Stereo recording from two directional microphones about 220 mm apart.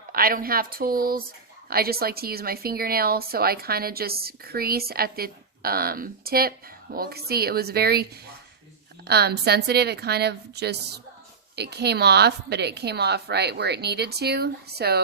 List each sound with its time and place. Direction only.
0.1 s a woman's voice: 40° right (ahead or behind)
9.0 s a woman's voice: 50° right (ahead or behind)